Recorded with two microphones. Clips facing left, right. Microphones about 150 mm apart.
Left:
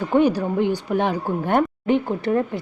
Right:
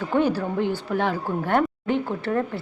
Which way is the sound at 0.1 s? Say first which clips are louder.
Left 4 dB; 15° left (ahead or behind).